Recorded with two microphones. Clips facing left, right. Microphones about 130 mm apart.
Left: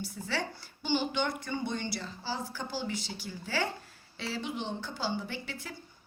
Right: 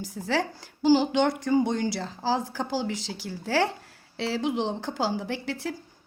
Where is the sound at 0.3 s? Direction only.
90° right.